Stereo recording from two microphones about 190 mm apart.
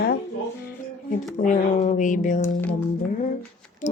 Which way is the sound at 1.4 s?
40° left (ahead or behind).